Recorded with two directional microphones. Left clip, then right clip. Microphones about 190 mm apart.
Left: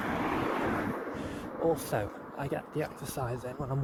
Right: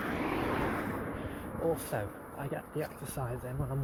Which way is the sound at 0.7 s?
35° right (ahead or behind).